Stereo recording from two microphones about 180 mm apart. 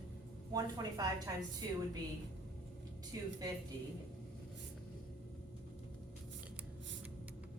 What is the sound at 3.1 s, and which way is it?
Speech, 20° right (ahead or behind).